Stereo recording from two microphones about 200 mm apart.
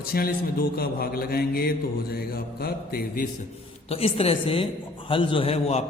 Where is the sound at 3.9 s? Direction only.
30° left (ahead or behind).